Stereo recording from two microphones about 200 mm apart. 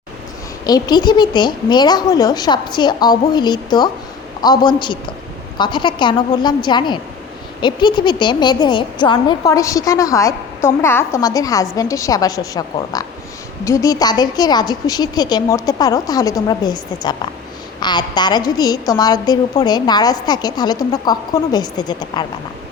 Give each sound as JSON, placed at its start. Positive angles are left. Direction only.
{"t": 0.6, "sound": "a woman's voice", "side_deg": 20}